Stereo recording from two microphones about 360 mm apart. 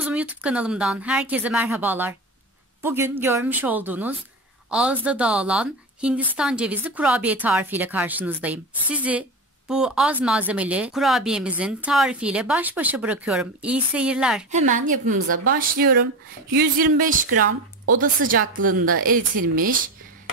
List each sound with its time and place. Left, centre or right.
0.0 s a woman's voice: centre
14.5 s speech: centre